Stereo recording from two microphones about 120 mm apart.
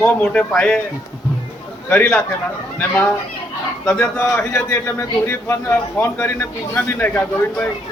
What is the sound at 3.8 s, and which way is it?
A man's voice, 15° left (ahead or behind).